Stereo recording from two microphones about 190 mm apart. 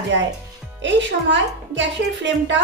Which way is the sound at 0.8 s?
70° right (ahead or behind).